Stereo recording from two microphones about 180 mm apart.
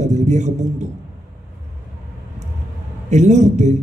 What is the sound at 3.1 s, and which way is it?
Speech, 40° right (ahead or behind).